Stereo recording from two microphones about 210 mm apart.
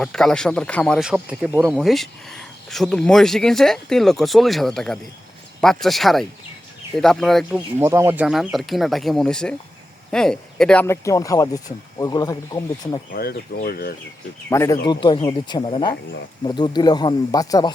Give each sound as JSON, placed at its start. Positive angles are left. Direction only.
{"t": 0.0, "sound": "speech", "side_deg": 5}
{"t": 7.8, "sound": "speech", "side_deg": -10}
{"t": 13.1, "sound": "speech", "side_deg": 45}
{"t": 14.5, "sound": "speech", "side_deg": 15}